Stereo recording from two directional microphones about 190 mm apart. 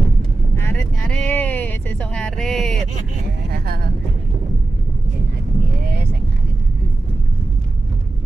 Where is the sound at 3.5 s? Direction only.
55° right (ahead or behind).